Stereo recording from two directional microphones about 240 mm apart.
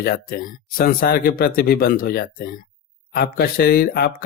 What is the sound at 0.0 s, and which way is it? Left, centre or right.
Speech, left.